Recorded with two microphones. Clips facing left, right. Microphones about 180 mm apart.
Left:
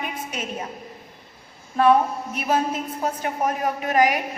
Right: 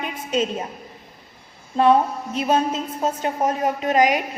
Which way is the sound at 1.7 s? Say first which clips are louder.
Right 1 dB; 25° right (ahead or behind).